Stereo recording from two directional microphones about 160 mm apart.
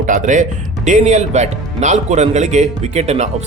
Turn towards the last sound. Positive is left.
turn(degrees=-45)  # may be behind; listen again after turning